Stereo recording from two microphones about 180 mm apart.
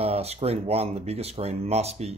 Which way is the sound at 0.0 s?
35° right (ahead or behind).